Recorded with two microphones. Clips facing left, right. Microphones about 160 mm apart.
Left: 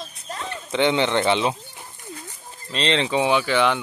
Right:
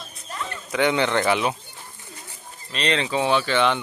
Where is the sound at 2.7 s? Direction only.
25° left (ahead or behind).